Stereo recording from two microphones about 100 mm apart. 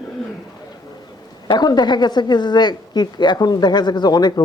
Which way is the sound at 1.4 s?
45° left (ahead or behind).